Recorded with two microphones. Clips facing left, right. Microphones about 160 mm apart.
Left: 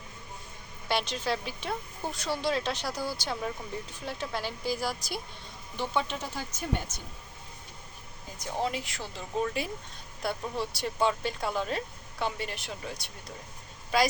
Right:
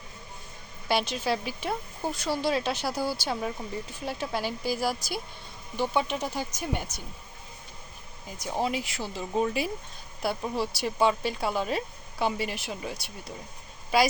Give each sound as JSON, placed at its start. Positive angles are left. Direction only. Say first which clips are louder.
{"t": 0.9, "sound": "speech", "louder": "right 3 dB", "side_deg": -5}
{"t": 8.4, "sound": "speech", "louder": "right 3 dB", "side_deg": -10}